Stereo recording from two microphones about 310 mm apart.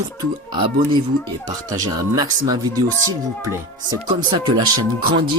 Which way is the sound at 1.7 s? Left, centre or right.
Centre.